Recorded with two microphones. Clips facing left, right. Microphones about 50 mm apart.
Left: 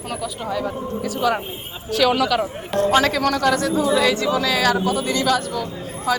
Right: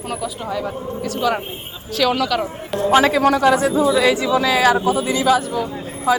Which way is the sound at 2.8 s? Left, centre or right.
Centre.